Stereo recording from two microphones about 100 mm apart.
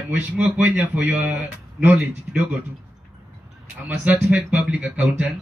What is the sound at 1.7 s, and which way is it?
Speech, 5° right (ahead or behind).